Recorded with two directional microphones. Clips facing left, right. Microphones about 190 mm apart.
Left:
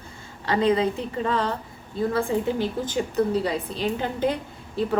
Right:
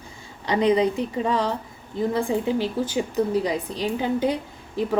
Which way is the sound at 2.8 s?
10° right (ahead or behind).